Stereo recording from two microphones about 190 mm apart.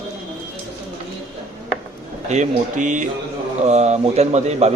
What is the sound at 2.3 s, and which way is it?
A man's voice, 40° right (ahead or behind).